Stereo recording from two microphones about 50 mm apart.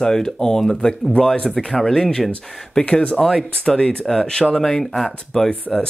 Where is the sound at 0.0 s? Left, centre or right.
Centre.